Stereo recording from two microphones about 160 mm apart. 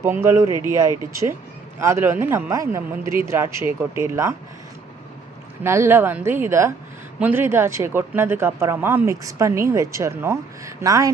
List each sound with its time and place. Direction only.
0.0 s speech: 15° right (ahead or behind)
1.8 s speech: 15° right (ahead or behind)
5.6 s speech: 15° right (ahead or behind)